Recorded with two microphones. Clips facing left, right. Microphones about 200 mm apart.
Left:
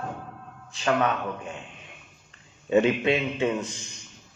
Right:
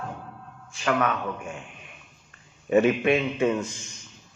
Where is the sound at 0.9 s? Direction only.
25° left (ahead or behind).